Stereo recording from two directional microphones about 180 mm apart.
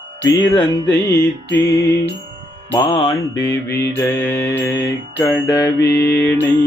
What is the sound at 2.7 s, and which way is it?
Mantra, 25° left (ahead or behind).